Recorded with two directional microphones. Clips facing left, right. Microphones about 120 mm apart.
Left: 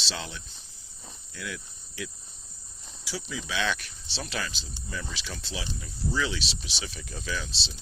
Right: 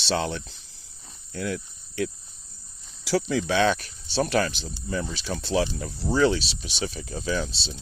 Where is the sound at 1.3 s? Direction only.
45° right (ahead or behind).